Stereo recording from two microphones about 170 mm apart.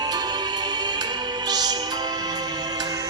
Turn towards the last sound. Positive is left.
turn(degrees=-20)  # may be behind; listen again after turning